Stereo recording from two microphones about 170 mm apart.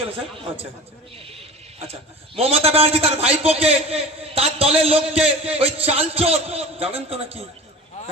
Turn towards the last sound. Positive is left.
turn(degrees=-35)  # may be behind; listen again after turning